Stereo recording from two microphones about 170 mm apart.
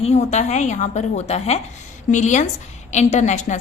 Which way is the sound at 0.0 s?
40° left (ahead or behind).